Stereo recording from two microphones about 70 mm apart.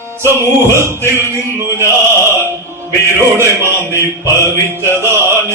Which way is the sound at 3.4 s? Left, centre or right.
Right.